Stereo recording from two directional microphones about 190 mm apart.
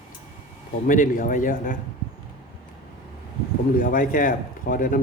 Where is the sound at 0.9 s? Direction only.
45° left (ahead or behind).